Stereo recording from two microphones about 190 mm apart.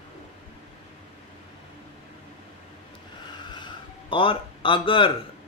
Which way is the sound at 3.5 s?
25° left (ahead or behind).